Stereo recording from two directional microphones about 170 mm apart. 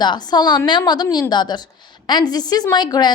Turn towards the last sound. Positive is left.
turn(degrees=25)  # may be behind; listen again after turning